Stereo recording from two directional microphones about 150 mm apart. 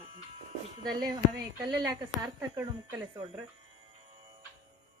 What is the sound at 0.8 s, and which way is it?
A woman's voice, 25° right (ahead or behind).